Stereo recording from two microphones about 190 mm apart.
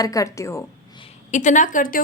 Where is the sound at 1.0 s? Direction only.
35° left (ahead or behind).